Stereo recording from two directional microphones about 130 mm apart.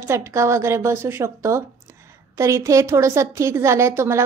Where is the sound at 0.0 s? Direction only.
20° right (ahead or behind).